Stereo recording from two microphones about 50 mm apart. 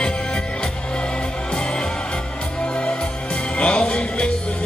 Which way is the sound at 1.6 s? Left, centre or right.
Centre.